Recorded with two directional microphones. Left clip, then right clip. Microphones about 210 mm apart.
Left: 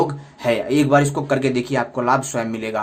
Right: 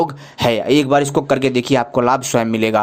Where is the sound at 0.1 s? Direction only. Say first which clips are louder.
Right 3 dB; 45° right (ahead or behind).